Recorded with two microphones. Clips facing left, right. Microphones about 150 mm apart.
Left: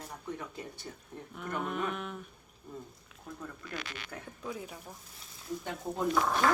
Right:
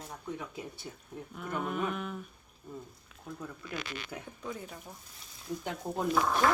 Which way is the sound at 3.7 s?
20° right (ahead or behind).